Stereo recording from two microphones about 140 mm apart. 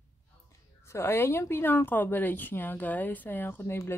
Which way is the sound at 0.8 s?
20° left (ahead or behind).